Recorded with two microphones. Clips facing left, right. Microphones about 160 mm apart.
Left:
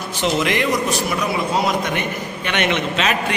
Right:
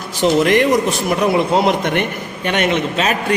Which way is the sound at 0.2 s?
45° right (ahead or behind).